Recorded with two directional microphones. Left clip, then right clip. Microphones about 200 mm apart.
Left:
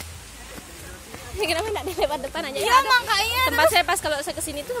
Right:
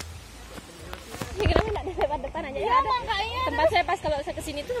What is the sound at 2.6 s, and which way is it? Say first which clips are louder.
Speech: left 5 dB; 35° left (ahead or behind).